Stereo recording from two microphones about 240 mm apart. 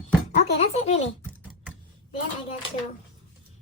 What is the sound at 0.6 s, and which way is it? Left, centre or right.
Speech, left.